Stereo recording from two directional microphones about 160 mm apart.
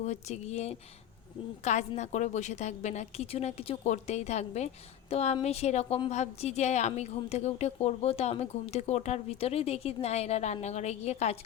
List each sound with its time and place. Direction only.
0.0 s a woman's voice: 45° left (ahead or behind)